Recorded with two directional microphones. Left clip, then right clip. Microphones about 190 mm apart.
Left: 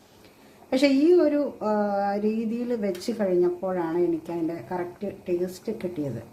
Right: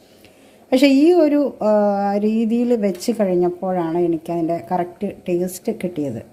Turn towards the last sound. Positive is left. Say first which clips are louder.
# right 7 dB
turn(degrees=-40)  # may be behind; listen again after turning